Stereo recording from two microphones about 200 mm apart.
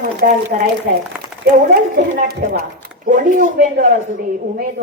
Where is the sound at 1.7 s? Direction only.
45° right (ahead or behind).